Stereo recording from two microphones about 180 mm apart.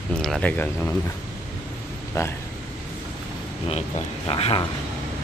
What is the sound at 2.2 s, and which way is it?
Speech, 20° left (ahead or behind).